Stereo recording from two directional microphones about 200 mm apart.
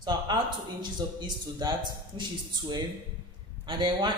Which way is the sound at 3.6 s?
25° right (ahead or behind).